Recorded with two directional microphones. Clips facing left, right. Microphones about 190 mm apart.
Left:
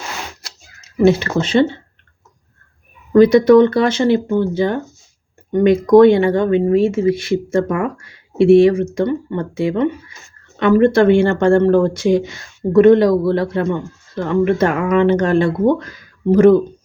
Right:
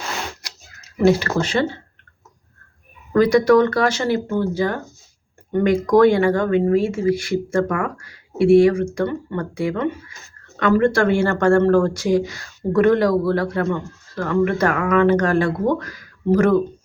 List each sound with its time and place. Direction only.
1.4 s speech: 25° left (ahead or behind)
3.1 s speech: 20° left (ahead or behind)